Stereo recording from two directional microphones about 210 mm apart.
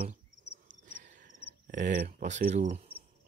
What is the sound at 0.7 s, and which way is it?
Cricket, 40° right (ahead or behind).